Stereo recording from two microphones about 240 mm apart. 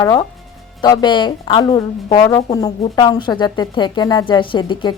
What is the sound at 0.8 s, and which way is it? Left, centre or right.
A woman's voice, centre.